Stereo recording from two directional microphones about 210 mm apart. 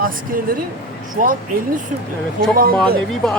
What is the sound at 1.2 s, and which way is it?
Speech, 40° right (ahead or behind).